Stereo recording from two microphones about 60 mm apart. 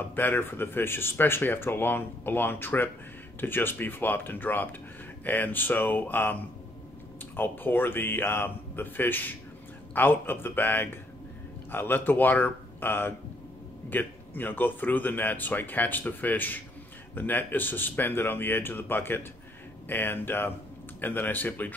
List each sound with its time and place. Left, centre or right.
0.1 s speech: left
7.3 s speech: left